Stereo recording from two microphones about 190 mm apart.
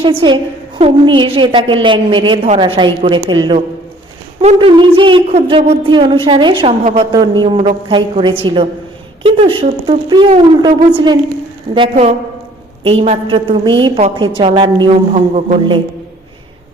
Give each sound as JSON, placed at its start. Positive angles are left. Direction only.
{"t": 0.0, "sound": "a woman's voice", "side_deg": -25}
{"t": 15.1, "sound": "a man's voice", "side_deg": -35}